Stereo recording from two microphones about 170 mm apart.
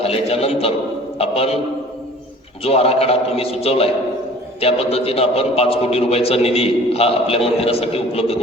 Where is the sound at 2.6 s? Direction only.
35° left (ahead or behind).